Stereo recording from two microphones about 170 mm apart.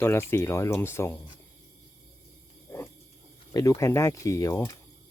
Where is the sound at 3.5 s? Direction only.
20° left (ahead or behind).